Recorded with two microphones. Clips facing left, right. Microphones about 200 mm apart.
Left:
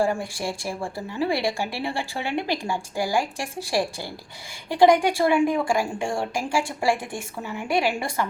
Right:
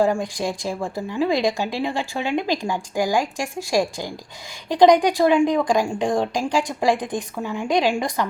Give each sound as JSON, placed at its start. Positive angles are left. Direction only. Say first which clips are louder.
{"t": 0.0, "sound": "a woman's voice", "louder": "right 4 dB", "side_deg": -15}